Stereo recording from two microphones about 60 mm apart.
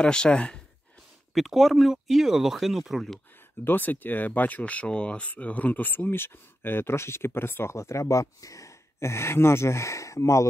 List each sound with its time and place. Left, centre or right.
0.0 s speech: centre
1.3 s speech: centre
3.6 s speech: left